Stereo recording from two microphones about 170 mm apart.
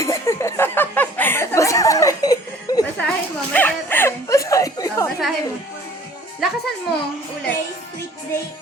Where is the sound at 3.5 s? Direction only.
10° left (ahead or behind).